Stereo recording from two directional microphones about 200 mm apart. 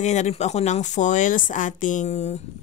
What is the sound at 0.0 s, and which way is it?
Speech, 35° left (ahead or behind).